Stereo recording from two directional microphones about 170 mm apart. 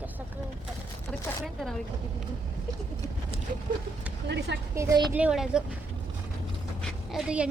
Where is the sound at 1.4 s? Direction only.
Centre (ahead or behind).